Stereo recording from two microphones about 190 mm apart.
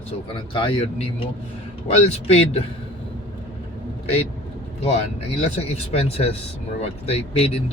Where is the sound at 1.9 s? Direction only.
30° left (ahead or behind).